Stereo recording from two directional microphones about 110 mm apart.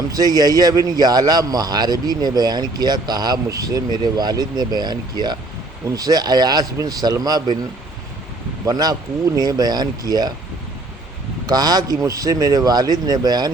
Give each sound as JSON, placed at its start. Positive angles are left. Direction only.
{"t": 0.1, "sound": "speech", "side_deg": -35}
{"t": 8.6, "sound": "speech", "side_deg": -35}
{"t": 11.4, "sound": "speech", "side_deg": -35}